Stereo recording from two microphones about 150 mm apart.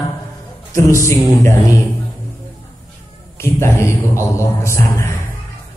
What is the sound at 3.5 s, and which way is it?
A man's voice, 15° left (ahead or behind).